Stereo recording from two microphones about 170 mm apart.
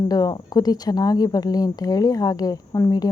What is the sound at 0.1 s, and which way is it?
Speech, 20° left (ahead or behind).